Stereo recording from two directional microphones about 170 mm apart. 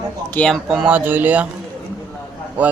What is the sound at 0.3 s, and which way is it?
Speech, 5° left (ahead or behind).